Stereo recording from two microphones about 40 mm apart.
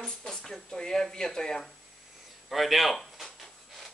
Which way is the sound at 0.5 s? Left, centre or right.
Centre.